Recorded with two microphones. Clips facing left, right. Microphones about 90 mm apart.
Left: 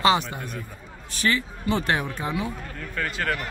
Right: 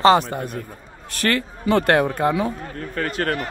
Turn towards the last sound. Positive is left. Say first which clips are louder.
# right 4 dB
turn(degrees=-40)  # may be behind; listen again after turning